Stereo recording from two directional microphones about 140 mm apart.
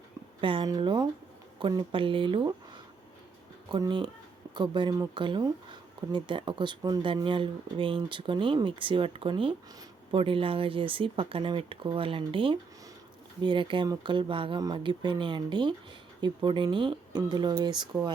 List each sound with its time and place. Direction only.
0.4 s speech: 35° right (ahead or behind)
3.7 s speech: 35° right (ahead or behind)